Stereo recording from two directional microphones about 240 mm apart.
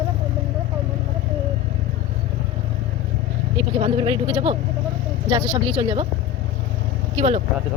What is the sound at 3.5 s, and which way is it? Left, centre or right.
Speech, right.